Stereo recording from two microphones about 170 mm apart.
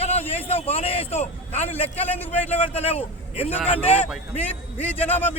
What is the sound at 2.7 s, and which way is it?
Speech, 35° left (ahead or behind).